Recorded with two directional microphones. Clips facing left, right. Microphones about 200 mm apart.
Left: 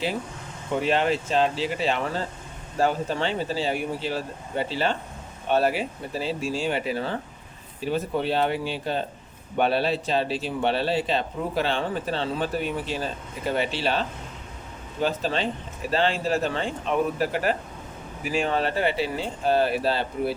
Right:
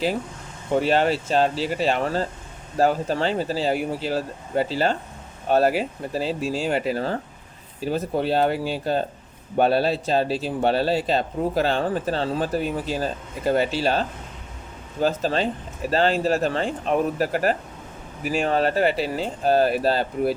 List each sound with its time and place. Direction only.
0.8 s speech: 40° right (ahead or behind)
15.0 s speech: 40° right (ahead or behind)